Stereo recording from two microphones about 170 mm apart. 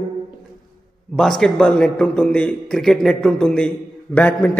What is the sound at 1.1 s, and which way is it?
A man's voice, centre (ahead or behind).